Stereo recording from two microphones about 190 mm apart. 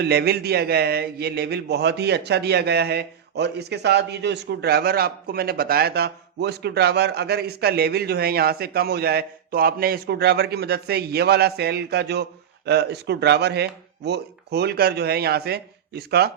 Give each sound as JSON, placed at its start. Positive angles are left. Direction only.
{"t": 0.0, "sound": "a man's voice", "side_deg": -60}